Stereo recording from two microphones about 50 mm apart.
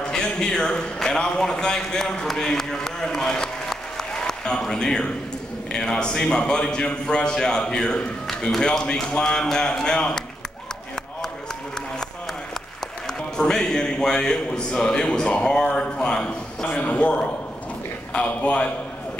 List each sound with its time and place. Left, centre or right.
0.0 s a man's voice: centre
13.4 s a man's voice: centre